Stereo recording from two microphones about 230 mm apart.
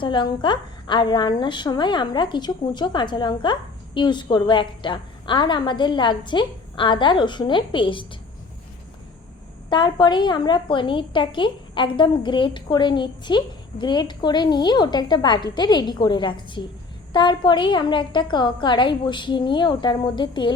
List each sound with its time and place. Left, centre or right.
0.0 s a woman's voice: left
9.6 s a woman's voice: centre